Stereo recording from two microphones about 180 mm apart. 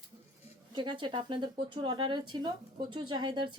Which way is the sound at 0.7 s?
25° right (ahead or behind).